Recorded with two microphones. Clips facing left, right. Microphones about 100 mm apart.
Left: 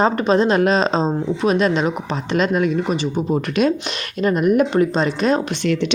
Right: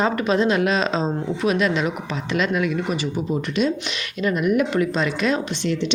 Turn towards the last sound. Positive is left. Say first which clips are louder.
# left 4 dB
turn(degrees=35)  # may be behind; listen again after turning